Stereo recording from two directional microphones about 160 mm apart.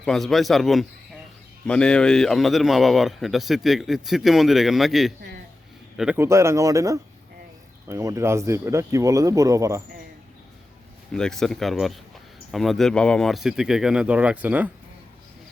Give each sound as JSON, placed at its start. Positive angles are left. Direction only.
{"t": 0.0, "sound": "a man's voice", "side_deg": 5}
{"t": 6.1, "sound": "speech", "side_deg": -15}
{"t": 11.1, "sound": "a man's voice", "side_deg": 5}